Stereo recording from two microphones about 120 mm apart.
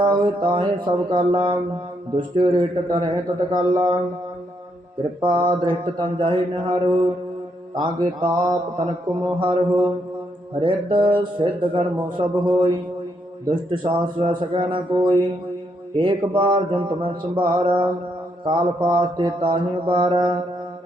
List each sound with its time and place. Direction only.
0.0 s mantra: 40° right (ahead or behind)
5.2 s mantra: 40° right (ahead or behind)